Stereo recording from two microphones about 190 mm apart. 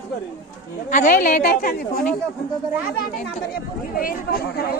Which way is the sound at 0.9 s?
40° left (ahead or behind).